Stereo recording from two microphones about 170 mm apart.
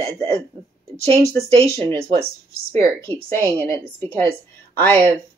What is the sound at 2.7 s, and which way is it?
A woman's voice, 15° left (ahead or behind).